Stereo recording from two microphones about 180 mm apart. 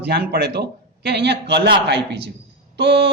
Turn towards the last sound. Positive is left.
turn(degrees=-70)  # may be behind; listen again after turning